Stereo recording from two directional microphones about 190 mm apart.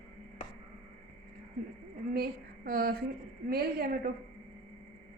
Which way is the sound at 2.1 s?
55° right (ahead or behind).